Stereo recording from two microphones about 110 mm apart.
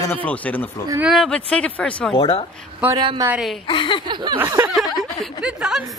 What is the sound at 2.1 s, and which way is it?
Speech, 60° left (ahead or behind).